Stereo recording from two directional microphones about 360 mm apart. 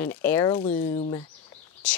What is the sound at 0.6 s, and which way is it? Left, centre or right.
Speech, centre.